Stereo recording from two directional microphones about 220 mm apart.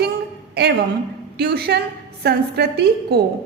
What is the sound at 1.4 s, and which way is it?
Speech, 45° right (ahead or behind).